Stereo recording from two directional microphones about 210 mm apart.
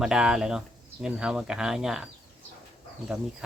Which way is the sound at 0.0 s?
5° right (ahead or behind).